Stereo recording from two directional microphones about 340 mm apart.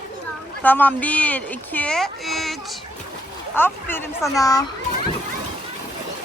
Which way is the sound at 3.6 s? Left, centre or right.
Centre.